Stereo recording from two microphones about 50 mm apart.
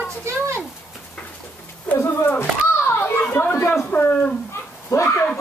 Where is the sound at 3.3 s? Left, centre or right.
Left.